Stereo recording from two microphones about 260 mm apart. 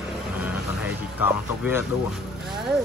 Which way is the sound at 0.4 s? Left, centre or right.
Centre.